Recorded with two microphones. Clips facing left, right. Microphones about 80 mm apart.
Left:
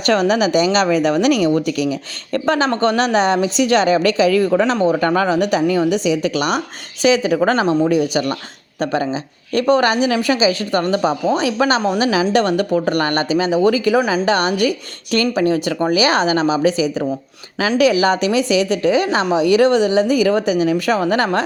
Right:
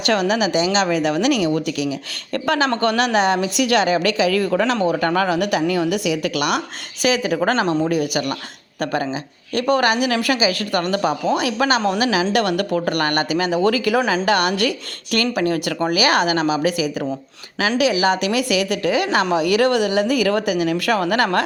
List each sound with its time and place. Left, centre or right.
0.0 s speech: left
2.6 s a woman's voice: left
8.1 s a woman's voice: left
18.3 s a woman's voice: left